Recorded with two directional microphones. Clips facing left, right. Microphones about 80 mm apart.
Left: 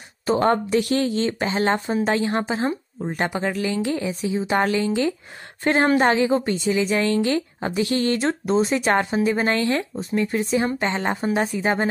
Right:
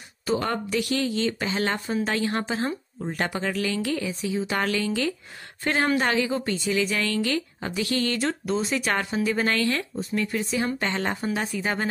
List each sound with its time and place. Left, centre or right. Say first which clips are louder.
0.3 s a woman's voice: left 7 dB; left